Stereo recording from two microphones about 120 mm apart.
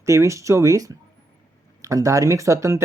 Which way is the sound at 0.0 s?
25° right (ahead or behind).